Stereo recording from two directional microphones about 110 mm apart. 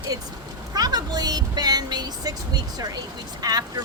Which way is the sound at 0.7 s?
35° right (ahead or behind).